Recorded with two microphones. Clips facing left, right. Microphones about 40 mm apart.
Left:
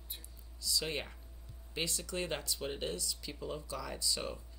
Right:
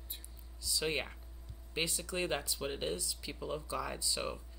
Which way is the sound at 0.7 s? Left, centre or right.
Centre.